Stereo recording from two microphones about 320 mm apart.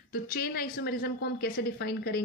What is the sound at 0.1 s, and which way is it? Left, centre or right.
A woman's voice, left.